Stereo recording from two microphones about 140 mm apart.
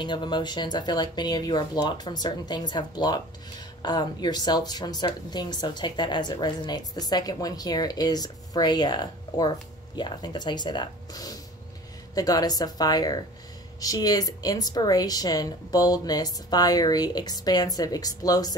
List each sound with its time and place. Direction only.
0.0 s a woman's voice: 35° left (ahead or behind)